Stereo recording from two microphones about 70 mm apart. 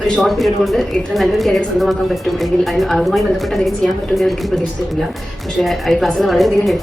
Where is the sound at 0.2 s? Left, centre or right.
Centre.